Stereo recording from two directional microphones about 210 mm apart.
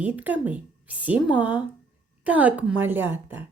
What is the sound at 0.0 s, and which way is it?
A woman's voice, 5° right (ahead or behind).